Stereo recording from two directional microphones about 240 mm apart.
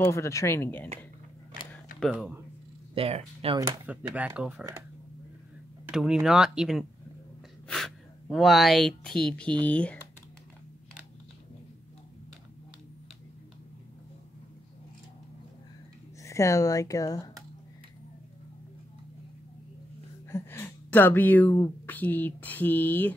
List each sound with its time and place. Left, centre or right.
0.0 s speech: centre
2.0 s speech: centre
2.9 s speech: right
3.8 s speech: centre
5.9 s speech: centre
16.2 s speech: centre
20.2 s speech: centre